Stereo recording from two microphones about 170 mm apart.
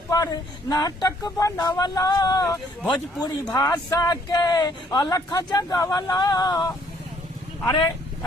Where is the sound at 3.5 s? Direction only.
20° left (ahead or behind).